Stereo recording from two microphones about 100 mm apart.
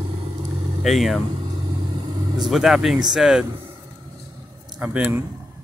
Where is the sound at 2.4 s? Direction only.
5° right (ahead or behind).